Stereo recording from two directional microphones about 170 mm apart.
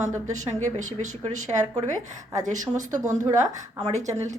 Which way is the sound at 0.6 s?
45° right (ahead or behind).